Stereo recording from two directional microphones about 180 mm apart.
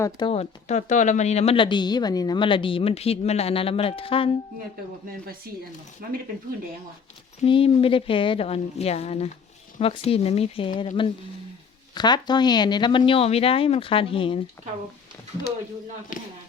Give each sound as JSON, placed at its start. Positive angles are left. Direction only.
{"t": 0.0, "sound": "speech", "side_deg": 25}
{"t": 6.0, "sound": "speech", "side_deg": -55}
{"t": 7.4, "sound": "speech", "side_deg": 30}